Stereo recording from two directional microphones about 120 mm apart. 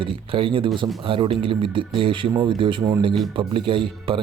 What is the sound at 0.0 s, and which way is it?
Speech, 45° right (ahead or behind).